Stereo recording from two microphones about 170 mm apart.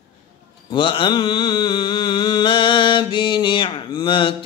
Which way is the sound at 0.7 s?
30° left (ahead or behind).